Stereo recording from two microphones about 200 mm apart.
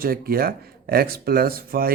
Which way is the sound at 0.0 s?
50° right (ahead or behind).